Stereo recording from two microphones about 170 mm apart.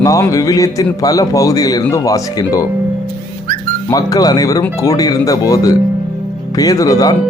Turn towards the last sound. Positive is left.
turn(degrees=20)  # may be behind; listen again after turning